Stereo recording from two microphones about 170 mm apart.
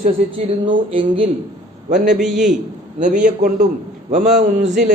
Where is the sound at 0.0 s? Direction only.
35° right (ahead or behind).